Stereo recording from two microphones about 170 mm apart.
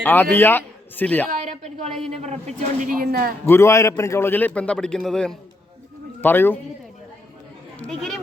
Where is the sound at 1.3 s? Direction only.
40° right (ahead or behind).